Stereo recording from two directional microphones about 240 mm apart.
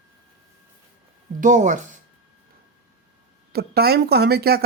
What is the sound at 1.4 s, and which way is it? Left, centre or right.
Speech, right.